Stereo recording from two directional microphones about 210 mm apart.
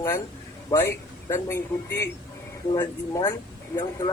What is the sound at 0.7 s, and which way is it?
A man's voice, 15° left (ahead or behind).